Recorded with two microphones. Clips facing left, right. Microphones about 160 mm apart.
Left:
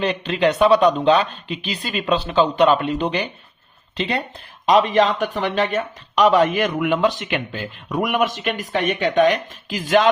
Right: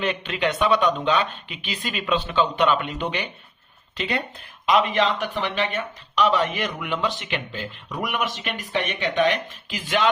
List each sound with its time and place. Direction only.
0.0 s speech: 35° left (ahead or behind)